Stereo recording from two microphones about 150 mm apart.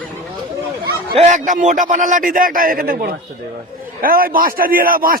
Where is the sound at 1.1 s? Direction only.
55° right (ahead or behind).